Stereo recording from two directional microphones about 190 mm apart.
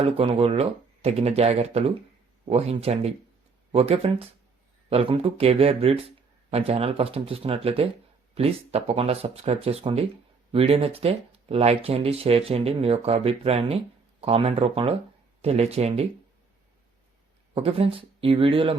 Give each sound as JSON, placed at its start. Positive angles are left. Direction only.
{"t": 0.0, "sound": "speech", "side_deg": -30}
{"t": 17.5, "sound": "speech", "side_deg": -30}